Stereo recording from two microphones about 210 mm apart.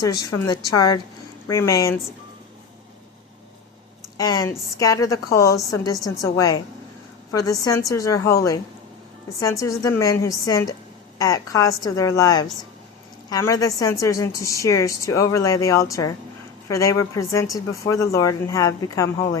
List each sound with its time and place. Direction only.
0.0 s a woman's voice: 20° left (ahead or behind)
4.2 s a woman's voice: 15° left (ahead or behind)